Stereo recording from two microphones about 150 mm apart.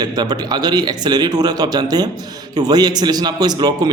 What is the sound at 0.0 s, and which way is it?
A man's voice, 30° right (ahead or behind).